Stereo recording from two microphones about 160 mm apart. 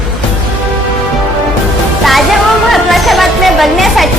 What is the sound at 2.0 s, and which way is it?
Music, centre (ahead or behind).